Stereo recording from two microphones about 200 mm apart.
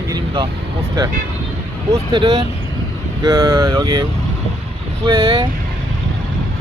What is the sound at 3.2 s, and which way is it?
Speech, 15° right (ahead or behind).